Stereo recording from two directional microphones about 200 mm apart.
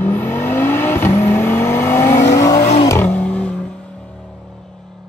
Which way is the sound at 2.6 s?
35° left (ahead or behind).